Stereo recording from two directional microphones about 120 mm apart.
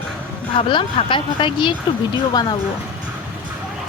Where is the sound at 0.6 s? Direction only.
45° left (ahead or behind).